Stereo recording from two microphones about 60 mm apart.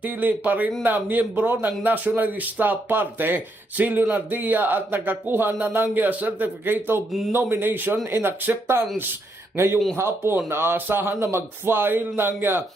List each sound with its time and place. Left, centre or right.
0.0 s a man's voice: right